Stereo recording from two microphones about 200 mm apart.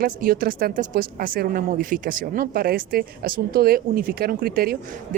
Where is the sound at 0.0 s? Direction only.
45° right (ahead or behind).